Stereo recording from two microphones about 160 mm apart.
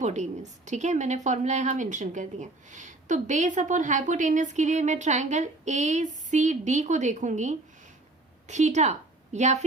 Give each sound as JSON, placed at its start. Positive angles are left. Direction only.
{"t": 0.0, "sound": "a woman's voice", "side_deg": -50}